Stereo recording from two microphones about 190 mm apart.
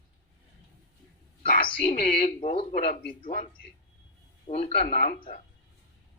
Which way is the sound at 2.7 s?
55° left (ahead or behind).